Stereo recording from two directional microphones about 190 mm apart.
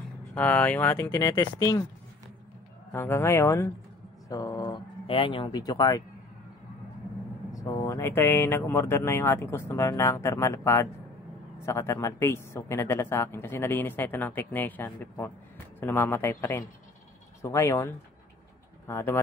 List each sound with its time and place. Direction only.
0.3 s speech: 10° left (ahead or behind)
2.9 s speech: 15° left (ahead or behind)
7.5 s speech: 15° left (ahead or behind)